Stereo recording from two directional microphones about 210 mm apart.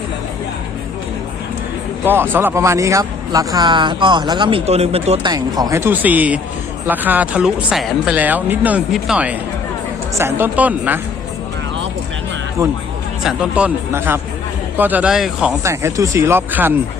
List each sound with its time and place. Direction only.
2.0 s speech: 10° right (ahead or behind)
13.2 s speech: 5° right (ahead or behind)